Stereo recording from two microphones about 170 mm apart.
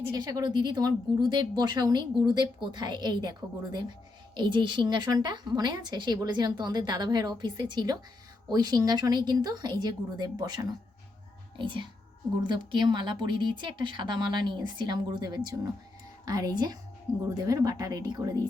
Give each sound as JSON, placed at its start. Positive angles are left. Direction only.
{"t": 0.1, "sound": "speech", "side_deg": -20}